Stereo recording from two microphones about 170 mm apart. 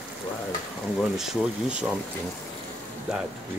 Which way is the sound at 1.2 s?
5° right (ahead or behind).